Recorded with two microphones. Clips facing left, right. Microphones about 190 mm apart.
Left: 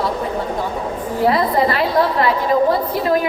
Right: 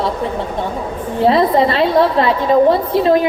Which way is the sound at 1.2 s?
25° right (ahead or behind).